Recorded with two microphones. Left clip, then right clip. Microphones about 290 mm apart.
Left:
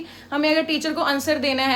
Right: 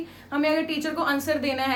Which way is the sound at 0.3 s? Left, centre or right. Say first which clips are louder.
Left 4 dB; left.